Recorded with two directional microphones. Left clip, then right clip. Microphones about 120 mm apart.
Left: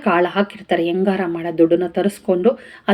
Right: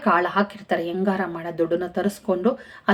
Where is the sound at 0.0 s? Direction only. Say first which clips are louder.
Left 3 dB; 15° left (ahead or behind).